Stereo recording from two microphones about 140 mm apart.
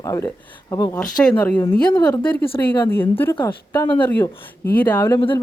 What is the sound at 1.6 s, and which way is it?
Speech, 35° left (ahead or behind).